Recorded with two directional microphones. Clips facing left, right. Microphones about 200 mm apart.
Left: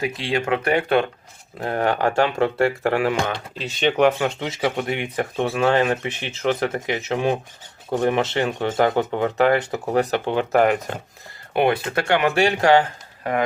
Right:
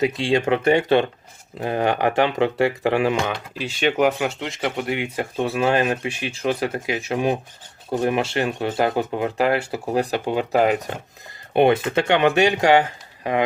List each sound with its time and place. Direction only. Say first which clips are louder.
0.0 s speech: right 4 dB; 25° right (ahead or behind)
3.5 s speech: left 1 dB; 5° right (ahead or behind)
4.4 s speech: left 2 dB; 5° left (ahead or behind)
4.9 s speech: even; 10° right (ahead or behind)
11.5 s speech: right 3 dB; 25° right (ahead or behind)